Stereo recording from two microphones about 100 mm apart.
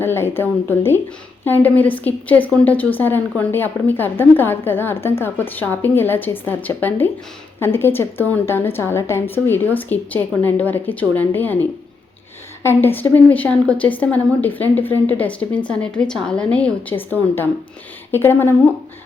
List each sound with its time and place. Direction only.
0.0 s a woman's voice: 25° left (ahead or behind)
12.6 s a woman's voice: 20° left (ahead or behind)